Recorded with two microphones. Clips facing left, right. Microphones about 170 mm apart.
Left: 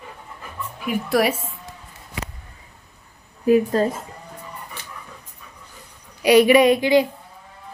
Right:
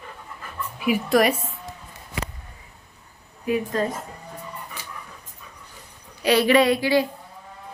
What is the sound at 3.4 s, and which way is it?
Speech, 35° left (ahead or behind).